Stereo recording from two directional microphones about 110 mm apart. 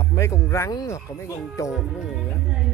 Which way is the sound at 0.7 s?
40° left (ahead or behind).